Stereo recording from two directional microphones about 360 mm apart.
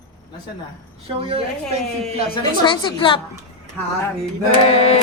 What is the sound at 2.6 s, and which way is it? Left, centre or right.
Music, centre.